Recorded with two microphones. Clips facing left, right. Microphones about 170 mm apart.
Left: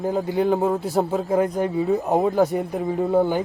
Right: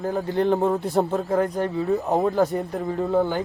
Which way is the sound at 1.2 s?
20° left (ahead or behind).